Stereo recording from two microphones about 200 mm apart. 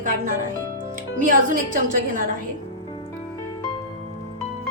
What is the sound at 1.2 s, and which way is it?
A woman's voice, 40° right (ahead or behind).